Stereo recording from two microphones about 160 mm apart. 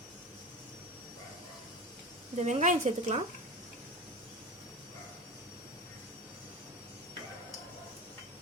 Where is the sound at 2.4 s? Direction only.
45° right (ahead or behind).